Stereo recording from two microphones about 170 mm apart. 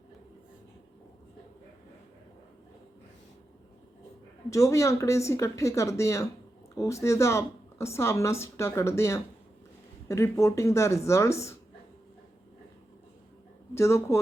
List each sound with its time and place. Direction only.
4.4 s a woman's voice: 20° left (ahead or behind)
13.7 s a woman's voice: 15° left (ahead or behind)